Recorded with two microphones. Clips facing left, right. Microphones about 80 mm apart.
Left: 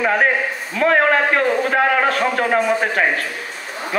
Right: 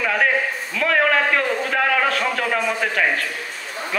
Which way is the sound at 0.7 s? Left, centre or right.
Left.